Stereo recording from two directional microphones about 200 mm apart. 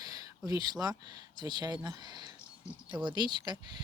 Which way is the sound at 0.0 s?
20° right (ahead or behind).